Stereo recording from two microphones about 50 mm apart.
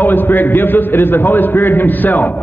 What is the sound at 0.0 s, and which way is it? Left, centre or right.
A man's voice, left.